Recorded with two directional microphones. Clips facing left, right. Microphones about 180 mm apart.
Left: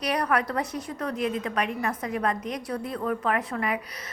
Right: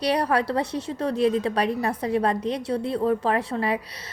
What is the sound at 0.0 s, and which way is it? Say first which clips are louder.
A woman's voice: right 3 dB; 30° right (ahead or behind).